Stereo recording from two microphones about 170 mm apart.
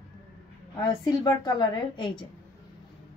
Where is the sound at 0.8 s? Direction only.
20° left (ahead or behind).